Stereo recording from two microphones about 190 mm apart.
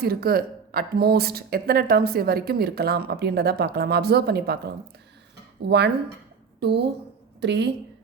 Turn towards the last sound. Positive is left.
turn(degrees=-65)  # may be behind; listen again after turning